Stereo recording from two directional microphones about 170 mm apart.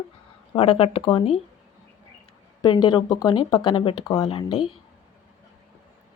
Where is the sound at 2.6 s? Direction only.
25° left (ahead or behind).